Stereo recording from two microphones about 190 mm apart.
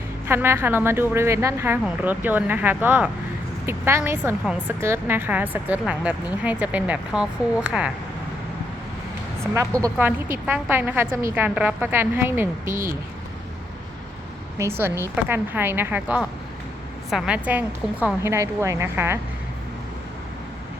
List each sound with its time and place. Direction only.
0.3 s a woman's voice: 10° right (ahead or behind)
9.6 s a woman's voice: 15° right (ahead or behind)
11.1 s speech: 45° right (ahead or behind)
11.3 s a woman's voice: 10° right (ahead or behind)
12.6 s speech: 45° right (ahead or behind)
14.6 s a woman's voice: 10° right (ahead or behind)